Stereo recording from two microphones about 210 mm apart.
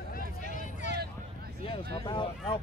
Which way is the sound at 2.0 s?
25° left (ahead or behind).